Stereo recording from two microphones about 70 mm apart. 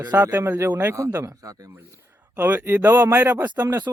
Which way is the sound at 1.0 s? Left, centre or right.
Right.